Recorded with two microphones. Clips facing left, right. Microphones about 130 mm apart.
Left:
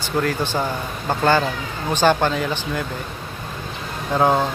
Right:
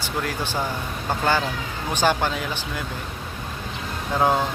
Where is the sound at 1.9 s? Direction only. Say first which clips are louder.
Left 4 dB; 10° right (ahead or behind).